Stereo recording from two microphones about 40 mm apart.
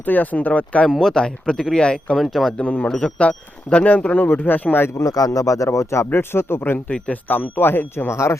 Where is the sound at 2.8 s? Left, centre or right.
Left.